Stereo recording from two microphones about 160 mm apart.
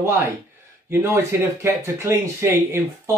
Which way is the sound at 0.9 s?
15° right (ahead or behind).